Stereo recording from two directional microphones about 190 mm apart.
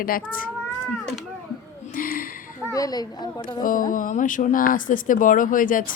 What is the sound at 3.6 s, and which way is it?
Speech, 45° left (ahead or behind).